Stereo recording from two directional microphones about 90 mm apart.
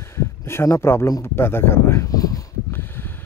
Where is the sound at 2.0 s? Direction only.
40° left (ahead or behind).